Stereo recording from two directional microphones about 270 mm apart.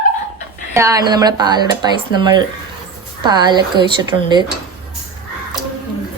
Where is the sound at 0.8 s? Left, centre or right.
Centre.